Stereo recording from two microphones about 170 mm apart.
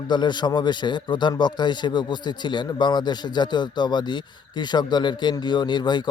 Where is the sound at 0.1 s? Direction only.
25° left (ahead or behind).